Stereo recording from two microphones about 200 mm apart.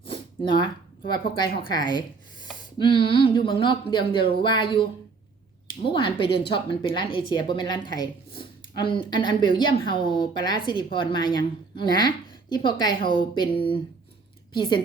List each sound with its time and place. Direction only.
0.0 s a sound: 25° left (ahead or behind)
1.4 s a woman's voice: 25° left (ahead or behind)
5.9 s a woman's voice: 25° left (ahead or behind)